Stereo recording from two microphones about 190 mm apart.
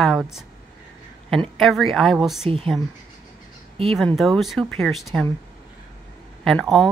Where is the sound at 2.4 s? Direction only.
30° right (ahead or behind).